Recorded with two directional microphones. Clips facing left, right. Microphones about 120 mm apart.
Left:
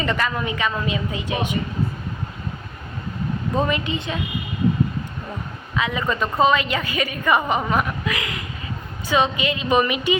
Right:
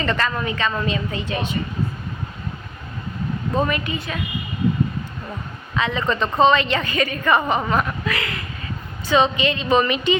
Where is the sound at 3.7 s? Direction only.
20° left (ahead or behind).